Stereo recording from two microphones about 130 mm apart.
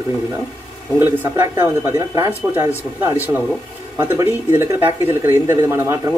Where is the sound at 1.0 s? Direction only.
15° right (ahead or behind).